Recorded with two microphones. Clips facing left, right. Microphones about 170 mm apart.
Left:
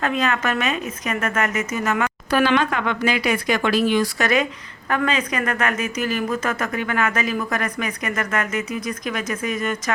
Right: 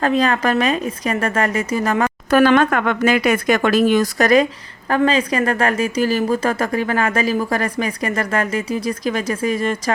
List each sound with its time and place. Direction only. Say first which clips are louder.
0.0 s a woman's voice: right 5 dB; 35° right (ahead or behind)
2.3 s a woman's voice: right 6 dB; 50° right (ahead or behind); by 9.9 s 30° right (ahead or behind)